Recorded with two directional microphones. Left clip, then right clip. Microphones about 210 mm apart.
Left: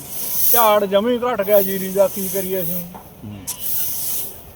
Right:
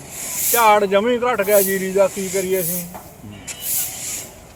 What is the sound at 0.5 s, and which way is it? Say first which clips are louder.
Speech: right 1 dB; centre (ahead or behind).